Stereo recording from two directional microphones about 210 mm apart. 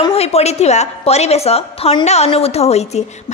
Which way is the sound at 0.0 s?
30° left (ahead or behind).